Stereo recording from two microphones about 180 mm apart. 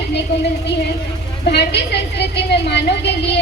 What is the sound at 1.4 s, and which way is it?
A woman's voice, 70° left (ahead or behind).